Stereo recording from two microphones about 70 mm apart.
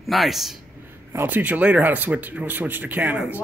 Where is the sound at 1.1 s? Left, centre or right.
Right.